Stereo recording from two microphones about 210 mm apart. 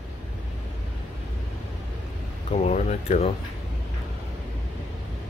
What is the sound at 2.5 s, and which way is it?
Speech, 35° left (ahead or behind).